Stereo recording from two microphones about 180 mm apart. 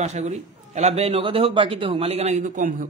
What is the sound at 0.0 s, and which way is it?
A man's voice, 40° right (ahead or behind).